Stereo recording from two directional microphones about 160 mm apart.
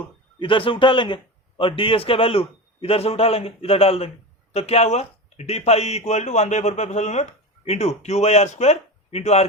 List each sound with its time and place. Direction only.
0.3 s a man's voice: 30° left (ahead or behind)